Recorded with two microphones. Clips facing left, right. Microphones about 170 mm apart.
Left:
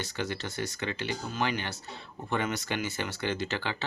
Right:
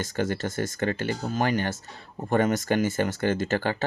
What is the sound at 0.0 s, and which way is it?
Speech, 45° right (ahead or behind).